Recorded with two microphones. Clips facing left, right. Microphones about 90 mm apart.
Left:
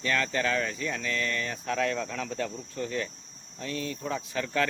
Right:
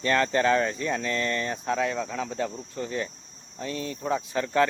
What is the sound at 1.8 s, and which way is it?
Speech, 15° right (ahead or behind).